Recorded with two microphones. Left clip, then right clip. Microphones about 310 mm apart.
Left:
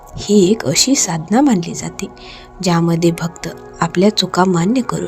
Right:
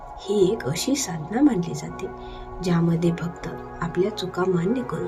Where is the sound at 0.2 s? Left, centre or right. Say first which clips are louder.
Left 8 dB; left.